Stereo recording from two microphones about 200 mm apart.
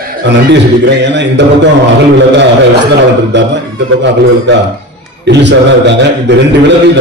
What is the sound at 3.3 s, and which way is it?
Speech, 60° right (ahead or behind).